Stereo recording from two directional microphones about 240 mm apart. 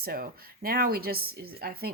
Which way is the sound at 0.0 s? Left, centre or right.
Right.